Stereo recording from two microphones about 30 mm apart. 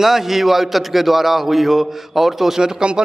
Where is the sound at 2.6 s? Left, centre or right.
Right.